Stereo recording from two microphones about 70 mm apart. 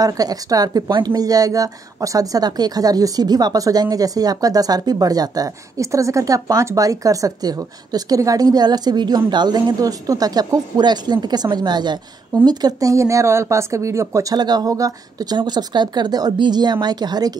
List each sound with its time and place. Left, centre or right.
0.0 s a woman's voice: right
12.4 s speech: right
12.9 s speech: right
14.3 s speech: right